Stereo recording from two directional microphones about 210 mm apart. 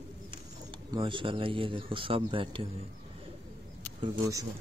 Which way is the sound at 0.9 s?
25° right (ahead or behind).